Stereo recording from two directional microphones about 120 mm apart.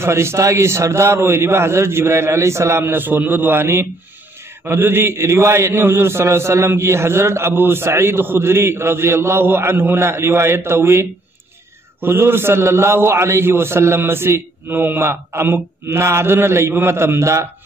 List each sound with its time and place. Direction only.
0.0 s a man's voice: 20° right (ahead or behind)